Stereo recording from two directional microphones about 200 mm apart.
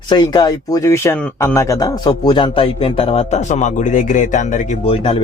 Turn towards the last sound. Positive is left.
turn(degrees=30)  # may be behind; listen again after turning